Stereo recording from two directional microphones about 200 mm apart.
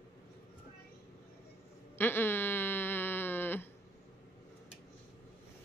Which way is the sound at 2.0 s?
10° left (ahead or behind).